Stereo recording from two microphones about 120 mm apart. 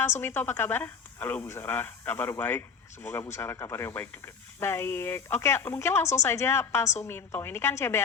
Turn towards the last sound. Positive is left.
turn(degrees=20)  # may be behind; listen again after turning